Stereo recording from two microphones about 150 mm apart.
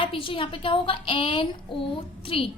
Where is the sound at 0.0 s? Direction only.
35° left (ahead or behind).